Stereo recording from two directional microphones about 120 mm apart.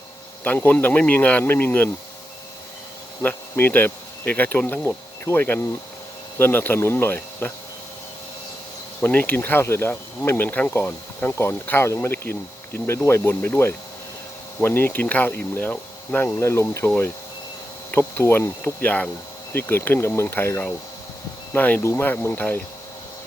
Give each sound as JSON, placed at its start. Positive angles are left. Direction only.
{"t": 0.4, "sound": "speech", "side_deg": 15}
{"t": 3.2, "sound": "speech", "side_deg": 20}
{"t": 9.0, "sound": "speech", "side_deg": 15}
{"t": 17.9, "sound": "speech", "side_deg": 15}